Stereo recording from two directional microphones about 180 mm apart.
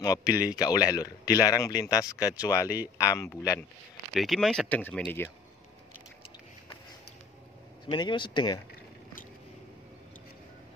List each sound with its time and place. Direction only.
0.0 s speech: 20° left (ahead or behind)
4.1 s speech: centre (ahead or behind)
7.8 s speech: 25° left (ahead or behind)